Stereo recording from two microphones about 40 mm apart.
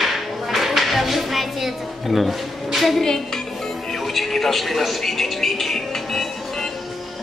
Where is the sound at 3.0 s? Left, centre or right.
Centre.